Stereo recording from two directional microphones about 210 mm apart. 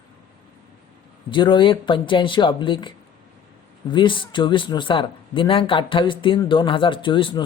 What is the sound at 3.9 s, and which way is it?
Speech, 20° left (ahead or behind).